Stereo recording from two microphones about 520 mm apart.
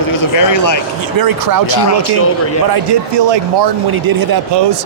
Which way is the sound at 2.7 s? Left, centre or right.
Right.